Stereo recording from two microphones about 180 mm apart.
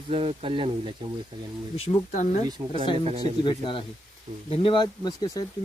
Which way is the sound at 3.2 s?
25° left (ahead or behind).